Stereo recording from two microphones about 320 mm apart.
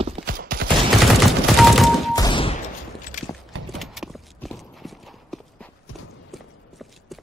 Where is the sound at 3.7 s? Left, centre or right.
Centre.